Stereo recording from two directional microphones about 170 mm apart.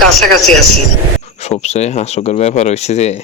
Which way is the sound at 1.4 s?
40° left (ahead or behind).